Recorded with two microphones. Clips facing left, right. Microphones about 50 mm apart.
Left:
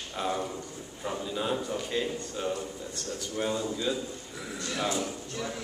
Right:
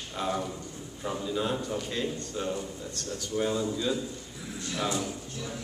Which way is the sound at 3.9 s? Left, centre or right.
Centre.